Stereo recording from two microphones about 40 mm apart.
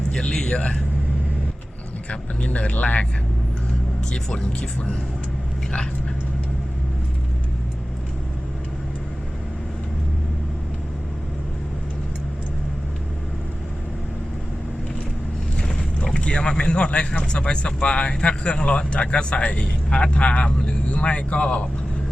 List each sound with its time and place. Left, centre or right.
0.1 s a man's voice: centre
2.0 s speech: left
4.1 s speech: left
16.1 s speech: left